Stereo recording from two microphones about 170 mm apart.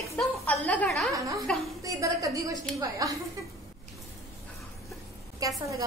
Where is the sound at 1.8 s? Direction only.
20° right (ahead or behind).